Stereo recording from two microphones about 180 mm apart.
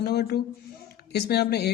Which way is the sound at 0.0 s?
60° left (ahead or behind).